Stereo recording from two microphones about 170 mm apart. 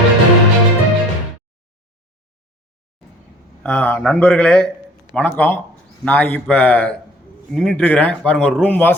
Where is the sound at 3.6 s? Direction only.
10° left (ahead or behind).